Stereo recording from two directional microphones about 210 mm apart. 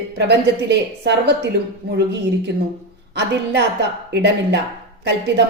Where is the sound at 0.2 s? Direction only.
55° right (ahead or behind).